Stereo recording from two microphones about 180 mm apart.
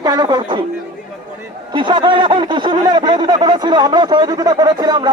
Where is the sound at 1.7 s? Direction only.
25° right (ahead or behind).